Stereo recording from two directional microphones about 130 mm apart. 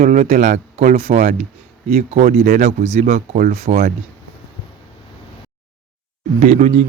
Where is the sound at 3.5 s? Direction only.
60° right (ahead or behind).